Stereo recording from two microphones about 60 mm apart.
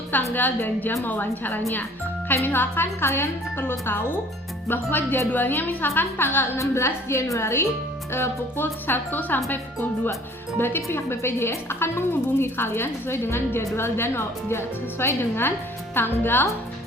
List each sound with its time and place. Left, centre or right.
0.1 s a woman's voice: left
6.6 s a woman's voice: left
10.6 s a woman's voice: left